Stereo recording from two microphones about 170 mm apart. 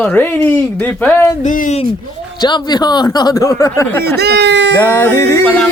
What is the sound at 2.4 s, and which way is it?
Speech, 25° left (ahead or behind).